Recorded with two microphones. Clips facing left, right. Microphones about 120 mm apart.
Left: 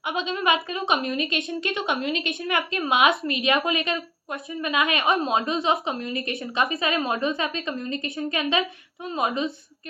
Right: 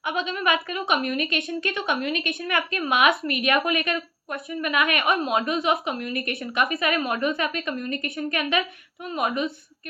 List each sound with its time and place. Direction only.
0.0 s a woman's voice: 25° left (ahead or behind)